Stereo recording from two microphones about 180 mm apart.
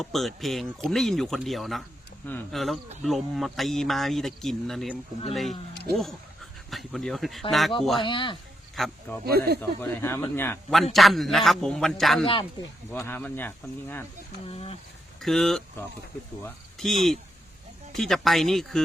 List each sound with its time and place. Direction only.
0.0 s speech: centre (ahead or behind)
8.0 s speech: 25° left (ahead or behind)
8.7 s a sound: centre (ahead or behind)
9.2 s speech: 60° right (ahead or behind)
9.6 s speech: 10° left (ahead or behind)
10.9 s speech: centre (ahead or behind)
12.2 s speech: 30° left (ahead or behind)
12.9 s speech: 10° left (ahead or behind)
14.4 s speech: 35° left (ahead or behind)
15.2 s speech: centre (ahead or behind)
16.7 s speech: centre (ahead or behind)